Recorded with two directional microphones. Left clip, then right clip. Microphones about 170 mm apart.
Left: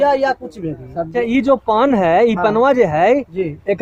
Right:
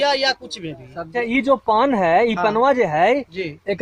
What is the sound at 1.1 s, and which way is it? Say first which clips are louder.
Speech: left 3 dB; 25° right (ahead or behind).